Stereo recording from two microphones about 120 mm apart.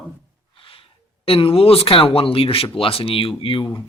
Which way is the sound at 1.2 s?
50° left (ahead or behind).